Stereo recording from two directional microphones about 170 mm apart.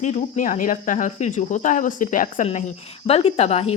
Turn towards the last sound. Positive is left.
turn(degrees=40)  # may be behind; listen again after turning